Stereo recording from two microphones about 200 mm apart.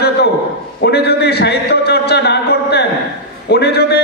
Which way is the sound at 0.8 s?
55° left (ahead or behind).